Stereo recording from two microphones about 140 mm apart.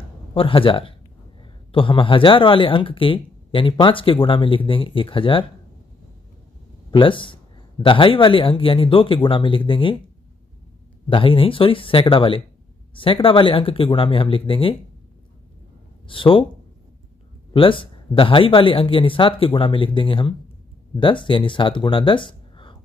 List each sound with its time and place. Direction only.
0.3 s speech: 40° left (ahead or behind)
6.9 s speech: 35° left (ahead or behind)
11.1 s speech: 40° left (ahead or behind)
16.1 s speech: 40° left (ahead or behind)
17.5 s speech: 40° left (ahead or behind)